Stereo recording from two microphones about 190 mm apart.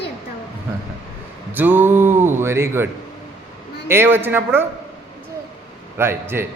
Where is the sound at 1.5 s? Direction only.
10° right (ahead or behind).